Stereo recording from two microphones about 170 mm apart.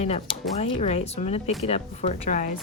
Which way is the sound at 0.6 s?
40° left (ahead or behind).